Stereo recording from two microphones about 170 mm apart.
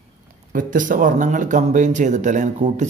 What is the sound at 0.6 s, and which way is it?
Speech, 50° right (ahead or behind).